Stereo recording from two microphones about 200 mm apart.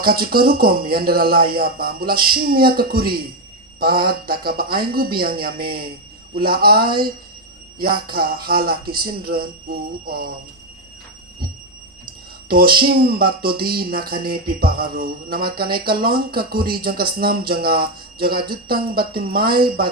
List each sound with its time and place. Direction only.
0.0 s speech: 50° right (ahead or behind)
8.0 s speech: 50° right (ahead or behind)
12.5 s speech: 50° right (ahead or behind)